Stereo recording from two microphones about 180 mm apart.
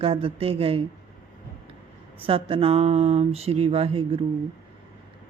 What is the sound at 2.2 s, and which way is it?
Speech, 30° right (ahead or behind).